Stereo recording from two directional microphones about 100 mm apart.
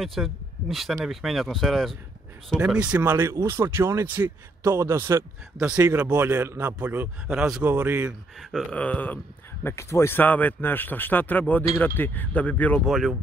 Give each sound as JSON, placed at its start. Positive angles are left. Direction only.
{"t": 0.0, "sound": "speech", "side_deg": 0}
{"t": 2.6, "sound": "speech", "side_deg": -10}
{"t": 7.4, "sound": "a man's voice", "side_deg": -5}
{"t": 7.7, "sound": "speech", "side_deg": -20}
{"t": 8.4, "sound": "speech", "side_deg": 0}
{"t": 8.7, "sound": "speech", "side_deg": 15}
{"t": 12.8, "sound": "speech", "side_deg": 0}